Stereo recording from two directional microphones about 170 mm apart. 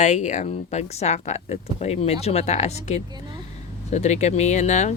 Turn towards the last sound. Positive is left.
turn(degrees=45)  # may be behind; listen again after turning